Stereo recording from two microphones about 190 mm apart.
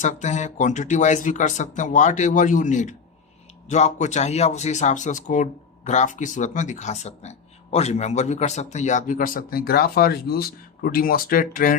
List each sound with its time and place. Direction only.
0.0 s speech: 40° left (ahead or behind)